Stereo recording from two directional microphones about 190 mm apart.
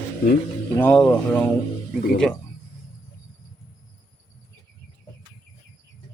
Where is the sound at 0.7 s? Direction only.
10° left (ahead or behind).